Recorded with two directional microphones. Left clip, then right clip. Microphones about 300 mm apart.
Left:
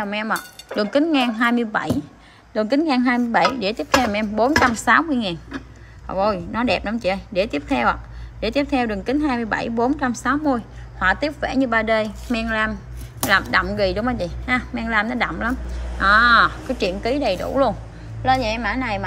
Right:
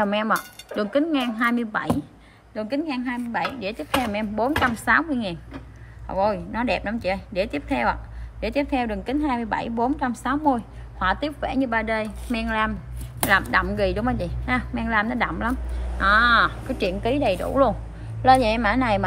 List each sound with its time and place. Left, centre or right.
0.0 s speech: centre
0.9 s a woman's voice: centre